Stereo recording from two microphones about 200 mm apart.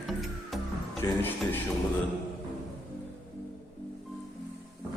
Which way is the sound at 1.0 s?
15° left (ahead or behind).